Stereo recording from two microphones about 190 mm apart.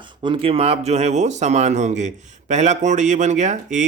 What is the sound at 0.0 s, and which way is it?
Speech, 25° right (ahead or behind).